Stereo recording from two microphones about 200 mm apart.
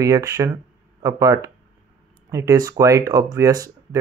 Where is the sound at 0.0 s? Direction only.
15° right (ahead or behind).